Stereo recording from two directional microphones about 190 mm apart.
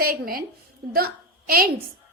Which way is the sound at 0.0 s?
50° right (ahead or behind).